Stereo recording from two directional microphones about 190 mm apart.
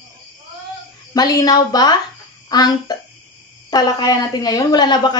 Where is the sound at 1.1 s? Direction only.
20° left (ahead or behind).